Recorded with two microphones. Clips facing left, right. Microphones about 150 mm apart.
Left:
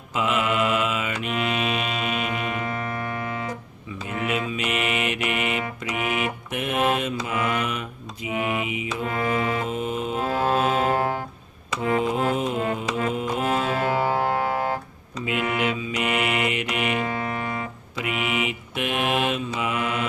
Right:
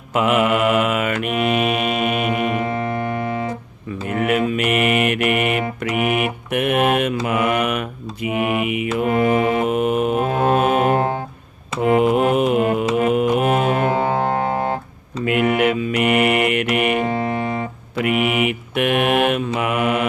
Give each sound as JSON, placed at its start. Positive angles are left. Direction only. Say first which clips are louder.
{"t": 0.1, "sound": "mantra", "louder": "right 7 dB", "side_deg": -60}
{"t": 2.6, "sound": "keyboard", "louder": "right 7 dB", "side_deg": -30}
{"t": 4.0, "sound": "music", "louder": "right 8 dB", "side_deg": -60}
{"t": 6.1, "sound": "mantra", "louder": "right 6 dB", "side_deg": -60}
{"t": 9.1, "sound": "mantra", "louder": "right 7 dB", "side_deg": -25}
{"t": 9.6, "sound": "music", "louder": "right 9 dB", "side_deg": -65}
{"t": 10.9, "sound": "music", "louder": "right 5 dB", "side_deg": -25}
{"t": 11.8, "sound": "music", "louder": "right 8 dB", "side_deg": -65}
{"t": 13.8, "sound": "music", "louder": "right 4 dB", "side_deg": -20}
{"t": 15.2, "sound": "mantra", "louder": "right 8 dB", "side_deg": -60}
{"t": 17.0, "sound": "music", "louder": "right 7 dB", "side_deg": -30}
{"t": 17.9, "sound": "mantra", "louder": "right 8 dB", "side_deg": -60}